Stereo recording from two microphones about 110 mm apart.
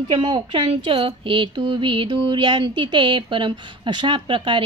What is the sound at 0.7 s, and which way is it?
Mantra, 60° right (ahead or behind).